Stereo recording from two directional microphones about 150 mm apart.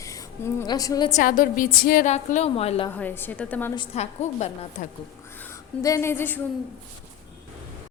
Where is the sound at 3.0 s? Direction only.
15° left (ahead or behind).